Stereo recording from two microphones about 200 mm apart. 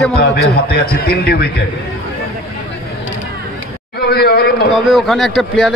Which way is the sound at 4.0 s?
50° left (ahead or behind).